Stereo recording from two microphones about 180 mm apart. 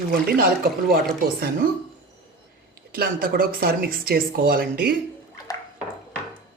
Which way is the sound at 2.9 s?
55° right (ahead or behind).